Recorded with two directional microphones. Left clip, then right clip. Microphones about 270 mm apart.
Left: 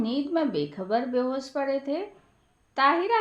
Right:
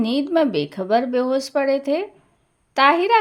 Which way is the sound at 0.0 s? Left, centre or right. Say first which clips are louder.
Right 8 dB; right.